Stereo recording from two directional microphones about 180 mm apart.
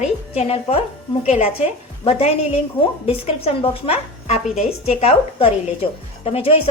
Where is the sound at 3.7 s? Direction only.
35° left (ahead or behind).